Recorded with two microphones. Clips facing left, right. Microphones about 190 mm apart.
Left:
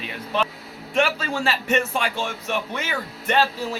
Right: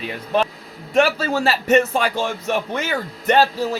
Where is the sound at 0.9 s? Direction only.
40° right (ahead or behind).